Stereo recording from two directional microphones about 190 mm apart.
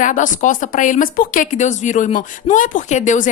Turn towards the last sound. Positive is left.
turn(degrees=40)  # may be behind; listen again after turning